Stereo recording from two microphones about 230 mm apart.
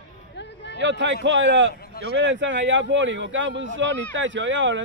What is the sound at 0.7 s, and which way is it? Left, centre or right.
Speech, right.